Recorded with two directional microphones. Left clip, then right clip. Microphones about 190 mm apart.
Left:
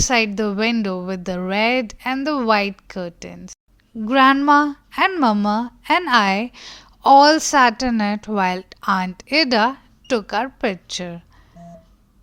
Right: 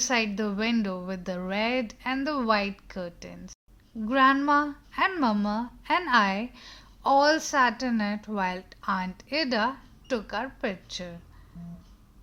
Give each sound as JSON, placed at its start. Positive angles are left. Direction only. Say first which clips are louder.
{"t": 0.0, "sound": "a woman's voice", "louder": "left 8 dB", "side_deg": 40}